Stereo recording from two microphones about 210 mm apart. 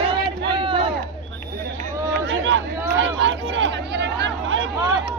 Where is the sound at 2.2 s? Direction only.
65° right (ahead or behind).